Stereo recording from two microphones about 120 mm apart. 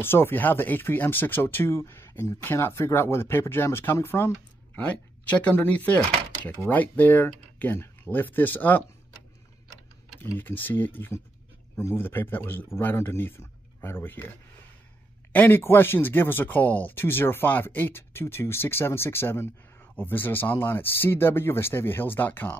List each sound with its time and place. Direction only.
0.0 s speech: 20° left (ahead or behind)
5.3 s speech: 15° left (ahead or behind)
10.3 s speech: 15° left (ahead or behind)
15.3 s speech: 15° left (ahead or behind)